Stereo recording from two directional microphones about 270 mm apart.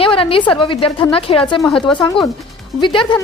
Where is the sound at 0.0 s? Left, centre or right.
Centre.